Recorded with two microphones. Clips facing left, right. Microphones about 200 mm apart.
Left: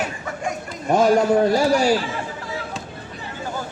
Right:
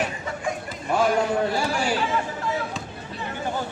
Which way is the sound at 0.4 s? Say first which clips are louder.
Left 5 dB; 40° left (ahead or behind).